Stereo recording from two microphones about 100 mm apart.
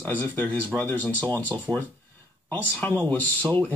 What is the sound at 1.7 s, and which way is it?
Speech, 20° right (ahead or behind).